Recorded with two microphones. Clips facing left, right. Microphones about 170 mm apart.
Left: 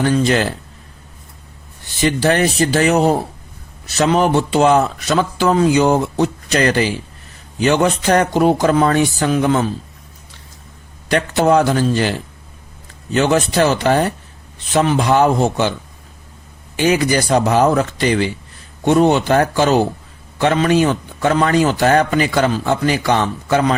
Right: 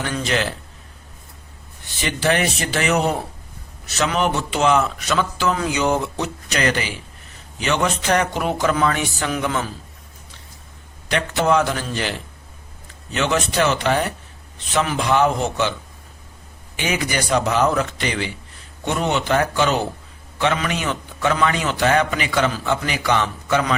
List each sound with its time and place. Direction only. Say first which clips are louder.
0.0 s a man's voice: left 8 dB; 35° left (ahead or behind)
2.2 s a man's voice: left 3 dB; 35° left (ahead or behind)
11.1 s a man's voice: left 5 dB; 40° left (ahead or behind)
13.1 s a man's voice: left 6 dB; 35° left (ahead or behind)
16.7 s a man's voice: left 8 dB; 35° left (ahead or behind)